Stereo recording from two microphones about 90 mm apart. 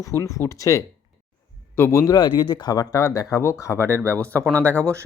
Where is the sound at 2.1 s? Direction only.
55° left (ahead or behind).